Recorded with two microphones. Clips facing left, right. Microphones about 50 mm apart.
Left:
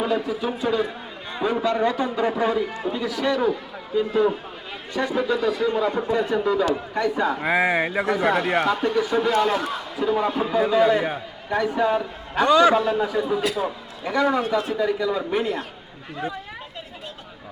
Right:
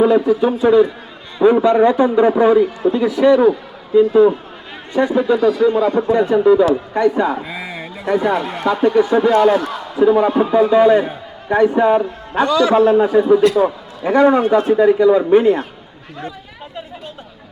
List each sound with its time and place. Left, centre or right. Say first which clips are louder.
0.0 s a man's voice: right 11 dB; centre; by 5.4 s right
5.4 s a man's voice: right 8 dB; centre
6.0 s a man's voice: right 8 dB; right
6.3 s speech: right 11 dB; centre
6.9 s a man's voice: right 7 dB; right
7.4 s speech: left 8 dB; left
8.6 s a man's voice: right 8 dB; right
12.5 s speech: left 1 dB; left
12.7 s a man's voice: right 9 dB; right